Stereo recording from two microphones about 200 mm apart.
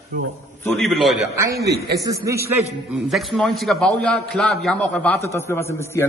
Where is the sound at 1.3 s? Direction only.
15° right (ahead or behind).